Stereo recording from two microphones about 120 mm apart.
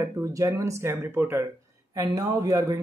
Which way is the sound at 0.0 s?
30° right (ahead or behind).